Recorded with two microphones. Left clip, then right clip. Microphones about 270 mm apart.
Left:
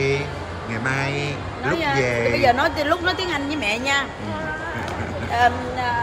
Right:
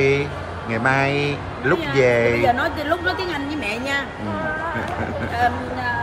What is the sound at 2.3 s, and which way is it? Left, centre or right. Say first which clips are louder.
A woman's voice: left 1 dB; left.